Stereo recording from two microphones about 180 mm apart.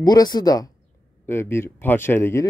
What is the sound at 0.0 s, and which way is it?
Speech, 20° left (ahead or behind).